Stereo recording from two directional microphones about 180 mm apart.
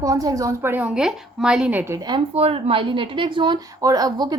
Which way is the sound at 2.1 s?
30° right (ahead or behind).